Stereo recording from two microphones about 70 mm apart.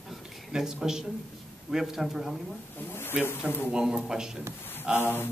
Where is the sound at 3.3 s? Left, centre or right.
Left.